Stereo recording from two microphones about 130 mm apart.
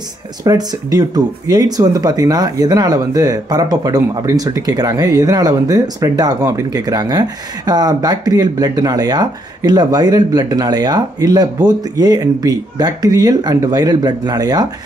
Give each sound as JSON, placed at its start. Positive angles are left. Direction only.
{"t": 0.4, "sound": "speech", "side_deg": -30}